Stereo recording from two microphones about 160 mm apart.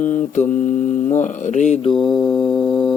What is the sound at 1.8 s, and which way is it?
Mantra, 30° left (ahead or behind).